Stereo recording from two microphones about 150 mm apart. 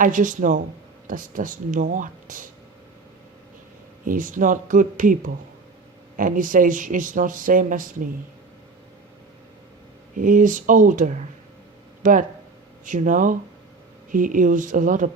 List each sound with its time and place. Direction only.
0.0 s speech: 60° right (ahead or behind)
4.0 s speech: 65° right (ahead or behind)
10.2 s speech: 60° right (ahead or behind)